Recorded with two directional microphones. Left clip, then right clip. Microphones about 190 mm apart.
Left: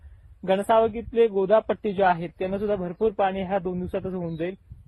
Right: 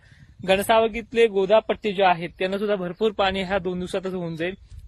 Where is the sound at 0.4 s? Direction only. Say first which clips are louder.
Right 2 dB; 30° right (ahead or behind).